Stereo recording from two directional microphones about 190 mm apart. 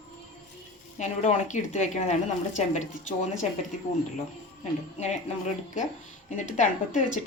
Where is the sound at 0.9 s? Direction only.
35° left (ahead or behind).